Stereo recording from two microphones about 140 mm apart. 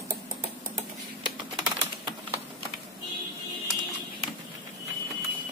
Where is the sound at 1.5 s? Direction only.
30° right (ahead or behind).